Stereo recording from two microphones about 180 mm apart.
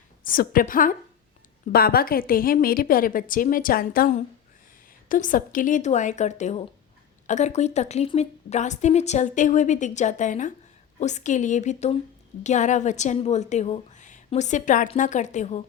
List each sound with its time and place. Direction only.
0.3 s a woman's voice: 50° left (ahead or behind)